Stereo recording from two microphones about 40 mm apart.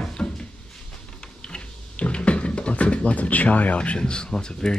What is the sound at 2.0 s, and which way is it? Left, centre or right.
Speech, left.